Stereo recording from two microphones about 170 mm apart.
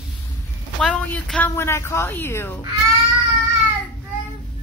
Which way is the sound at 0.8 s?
10° left (ahead or behind).